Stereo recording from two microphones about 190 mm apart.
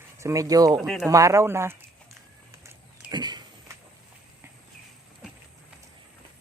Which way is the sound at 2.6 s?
20° right (ahead or behind).